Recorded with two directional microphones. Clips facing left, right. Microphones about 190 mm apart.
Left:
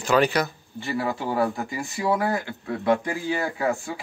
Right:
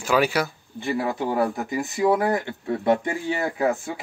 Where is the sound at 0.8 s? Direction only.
20° right (ahead or behind).